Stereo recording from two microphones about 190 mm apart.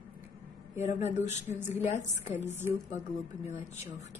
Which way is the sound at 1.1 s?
35° left (ahead or behind).